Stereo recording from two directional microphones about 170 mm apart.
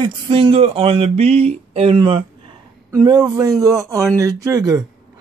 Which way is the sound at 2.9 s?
20° right (ahead or behind).